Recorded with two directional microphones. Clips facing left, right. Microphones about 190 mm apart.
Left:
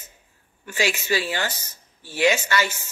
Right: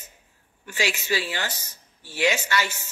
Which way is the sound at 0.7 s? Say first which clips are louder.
Left 3 dB; 50° left (ahead or behind).